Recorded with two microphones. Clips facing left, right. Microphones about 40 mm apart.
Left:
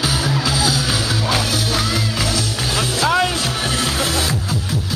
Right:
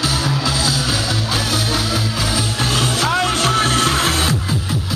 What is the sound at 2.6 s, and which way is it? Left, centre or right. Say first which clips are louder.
Music: right 2 dB; right.